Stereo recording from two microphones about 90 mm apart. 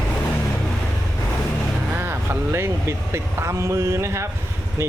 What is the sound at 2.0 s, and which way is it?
Speech, 30° right (ahead or behind).